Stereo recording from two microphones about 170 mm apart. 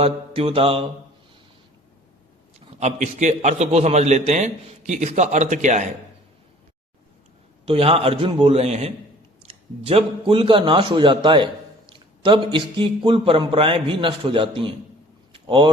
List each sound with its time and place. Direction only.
0.0 s a man's voice: 35° right (ahead or behind)
2.6 s a man's voice: 40° right (ahead or behind)
7.6 s a man's voice: 35° right (ahead or behind)
15.3 s vehicle: 30° right (ahead or behind)